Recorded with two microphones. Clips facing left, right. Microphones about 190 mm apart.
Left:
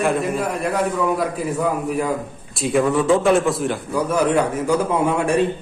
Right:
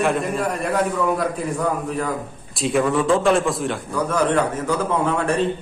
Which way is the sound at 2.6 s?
Centre (ahead or behind).